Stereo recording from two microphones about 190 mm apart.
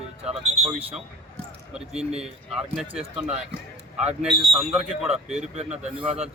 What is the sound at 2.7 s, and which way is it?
Speech, centre (ahead or behind).